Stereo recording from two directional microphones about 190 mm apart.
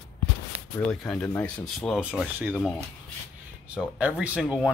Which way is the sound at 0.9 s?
Centre (ahead or behind).